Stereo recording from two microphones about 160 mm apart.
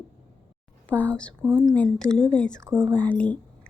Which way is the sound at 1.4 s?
25° right (ahead or behind).